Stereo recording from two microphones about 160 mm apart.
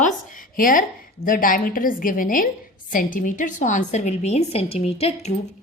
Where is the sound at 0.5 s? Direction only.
60° left (ahead or behind).